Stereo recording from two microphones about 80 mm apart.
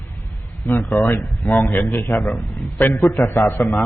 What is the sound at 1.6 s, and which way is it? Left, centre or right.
Speech, left.